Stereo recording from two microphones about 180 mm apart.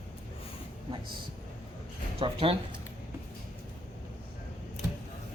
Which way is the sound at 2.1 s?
30° right (ahead or behind).